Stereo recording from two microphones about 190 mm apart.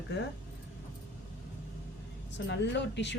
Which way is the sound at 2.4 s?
65° left (ahead or behind).